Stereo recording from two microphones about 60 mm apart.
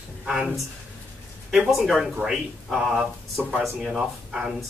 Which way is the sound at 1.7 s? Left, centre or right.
Centre.